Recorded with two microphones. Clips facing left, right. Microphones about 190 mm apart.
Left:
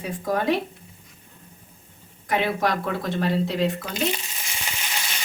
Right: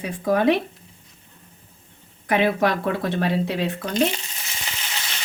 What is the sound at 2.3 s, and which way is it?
Speech, 60° right (ahead or behind).